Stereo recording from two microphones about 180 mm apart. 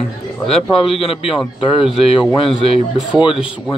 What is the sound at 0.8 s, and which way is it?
Speech, 30° left (ahead or behind).